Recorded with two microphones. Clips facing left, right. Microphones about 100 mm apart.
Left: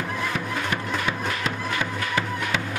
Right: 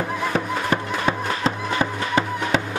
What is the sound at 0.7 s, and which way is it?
Music, 35° right (ahead or behind).